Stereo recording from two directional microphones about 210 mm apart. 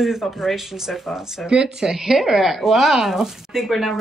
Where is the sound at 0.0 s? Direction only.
Centre (ahead or behind).